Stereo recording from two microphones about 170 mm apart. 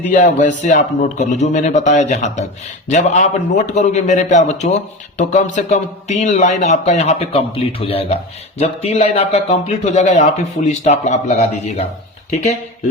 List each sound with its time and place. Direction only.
0.1 s a man's voice: 45° left (ahead or behind)